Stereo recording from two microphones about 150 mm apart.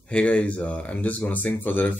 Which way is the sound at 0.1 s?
10° left (ahead or behind).